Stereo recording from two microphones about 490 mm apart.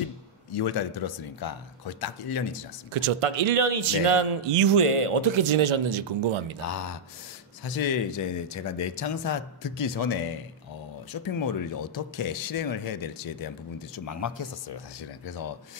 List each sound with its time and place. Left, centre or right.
0.6 s speech: left
2.9 s a man's voice: right
7.6 s speech: left
11.2 s speech: left